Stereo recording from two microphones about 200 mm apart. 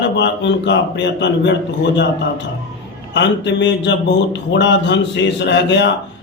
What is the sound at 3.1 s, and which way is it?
Speech, 60° left (ahead or behind).